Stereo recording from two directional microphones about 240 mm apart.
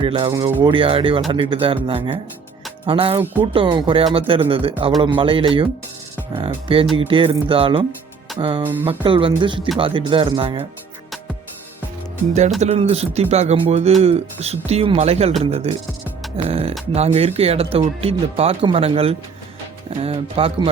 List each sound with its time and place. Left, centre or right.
0.0 s speech: right
8.6 s speech: centre
8.9 s speech: right
12.5 s speech: right